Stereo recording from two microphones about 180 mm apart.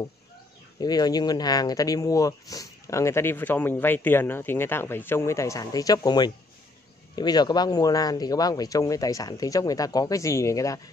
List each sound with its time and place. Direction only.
0.7 s speech: 20° left (ahead or behind)